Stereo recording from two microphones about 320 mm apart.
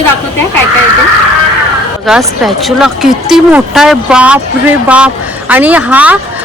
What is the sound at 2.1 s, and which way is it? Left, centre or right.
A woman's voice, centre.